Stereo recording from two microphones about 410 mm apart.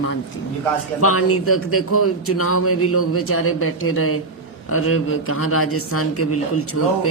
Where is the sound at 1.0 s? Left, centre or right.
Left.